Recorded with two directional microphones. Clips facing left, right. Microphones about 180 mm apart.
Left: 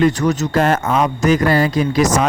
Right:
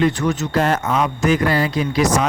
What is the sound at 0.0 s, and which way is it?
Speech, 40° left (ahead or behind).